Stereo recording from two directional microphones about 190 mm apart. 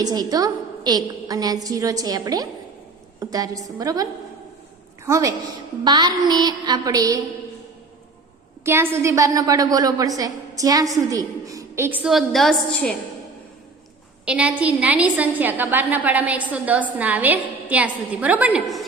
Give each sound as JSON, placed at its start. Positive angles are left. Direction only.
{"t": 0.0, "sound": "a woman's voice", "side_deg": -20}
{"t": 8.6, "sound": "a woman's voice", "side_deg": -15}
{"t": 14.3, "sound": "a woman's voice", "side_deg": -5}